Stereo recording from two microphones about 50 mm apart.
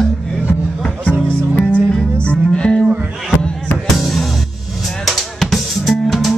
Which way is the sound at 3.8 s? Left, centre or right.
Centre.